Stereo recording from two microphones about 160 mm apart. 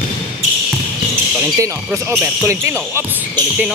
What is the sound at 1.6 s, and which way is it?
Speech, 20° right (ahead or behind).